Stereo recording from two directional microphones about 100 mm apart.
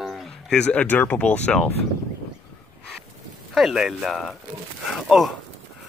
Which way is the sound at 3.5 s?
5° right (ahead or behind).